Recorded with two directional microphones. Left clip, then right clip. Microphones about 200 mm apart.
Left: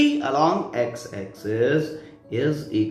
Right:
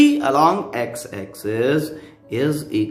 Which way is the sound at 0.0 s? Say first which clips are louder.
Right 5 dB; 45° right (ahead or behind).